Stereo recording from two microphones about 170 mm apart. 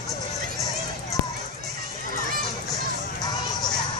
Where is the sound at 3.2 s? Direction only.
25° left (ahead or behind).